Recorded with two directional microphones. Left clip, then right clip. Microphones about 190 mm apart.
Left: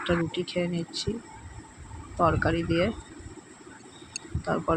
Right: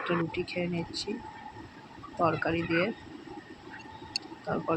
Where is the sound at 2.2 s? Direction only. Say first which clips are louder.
Left 3 dB; 20° left (ahead or behind).